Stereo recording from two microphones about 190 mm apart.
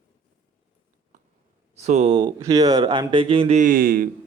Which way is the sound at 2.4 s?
20° right (ahead or behind).